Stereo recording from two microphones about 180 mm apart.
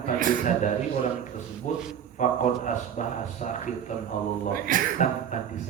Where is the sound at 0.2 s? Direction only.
50° right (ahead or behind).